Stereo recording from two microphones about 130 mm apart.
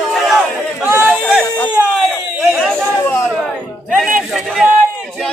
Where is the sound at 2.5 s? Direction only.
Centre (ahead or behind).